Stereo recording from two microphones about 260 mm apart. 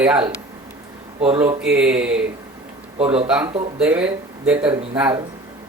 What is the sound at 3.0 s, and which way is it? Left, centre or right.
Speech, right.